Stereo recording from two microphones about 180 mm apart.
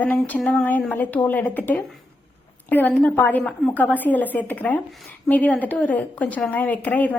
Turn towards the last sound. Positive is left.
turn(degrees=10)  # may be behind; listen again after turning